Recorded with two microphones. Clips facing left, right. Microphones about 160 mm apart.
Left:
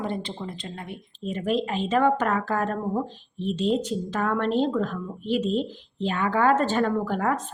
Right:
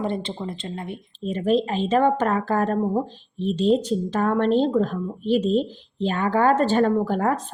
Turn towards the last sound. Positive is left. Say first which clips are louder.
# right 3 dB
turn(degrees=-35)  # may be behind; listen again after turning